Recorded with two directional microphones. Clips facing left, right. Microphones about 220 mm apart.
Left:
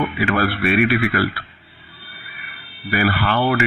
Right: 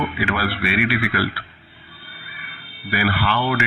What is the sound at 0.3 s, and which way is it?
Speech, 45° left (ahead or behind).